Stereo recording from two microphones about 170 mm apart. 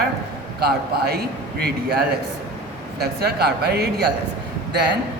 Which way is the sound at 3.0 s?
70° right (ahead or behind).